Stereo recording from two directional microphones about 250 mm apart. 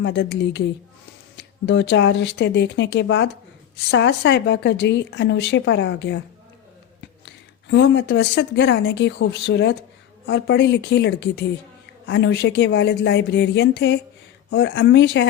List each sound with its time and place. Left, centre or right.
0.0 s speech: left
7.7 s speech: left